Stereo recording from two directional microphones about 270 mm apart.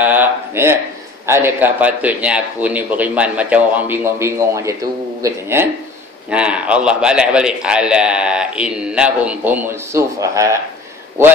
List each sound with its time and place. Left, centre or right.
0.0 s speech: centre